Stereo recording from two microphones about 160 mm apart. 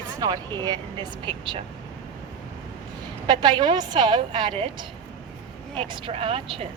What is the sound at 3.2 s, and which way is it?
Speech, 30° right (ahead or behind).